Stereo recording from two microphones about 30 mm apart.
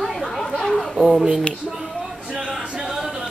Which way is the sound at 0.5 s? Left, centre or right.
Centre.